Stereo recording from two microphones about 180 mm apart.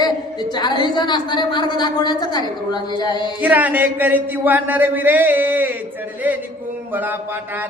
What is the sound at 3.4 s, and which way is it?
Mantra, 10° right (ahead or behind).